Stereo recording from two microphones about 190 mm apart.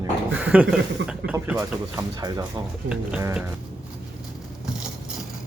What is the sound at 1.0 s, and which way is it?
Speech, 75° right (ahead or behind).